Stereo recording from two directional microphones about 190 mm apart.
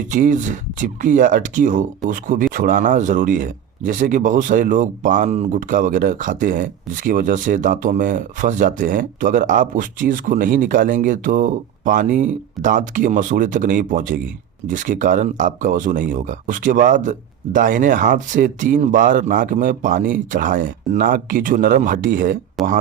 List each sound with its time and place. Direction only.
0.1 s speech: 45° right (ahead or behind)
22.6 s speech: centre (ahead or behind)